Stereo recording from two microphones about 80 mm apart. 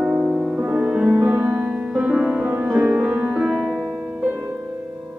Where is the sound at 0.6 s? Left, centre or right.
Centre.